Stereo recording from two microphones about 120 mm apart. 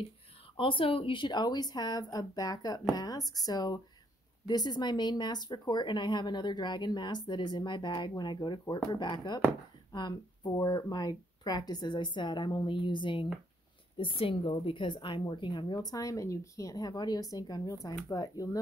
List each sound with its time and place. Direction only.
0.6 s a woman's voice: 45° left (ahead or behind); by 18.6 s 30° left (ahead or behind)